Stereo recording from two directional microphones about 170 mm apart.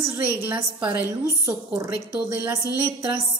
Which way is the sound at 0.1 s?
15° right (ahead or behind).